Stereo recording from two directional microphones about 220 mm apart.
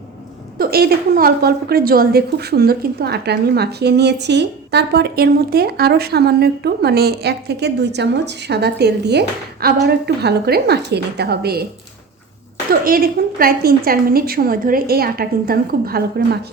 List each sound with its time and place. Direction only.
0.6 s a woman's voice: 45° right (ahead or behind)
12.8 s a woman's voice: 40° right (ahead or behind)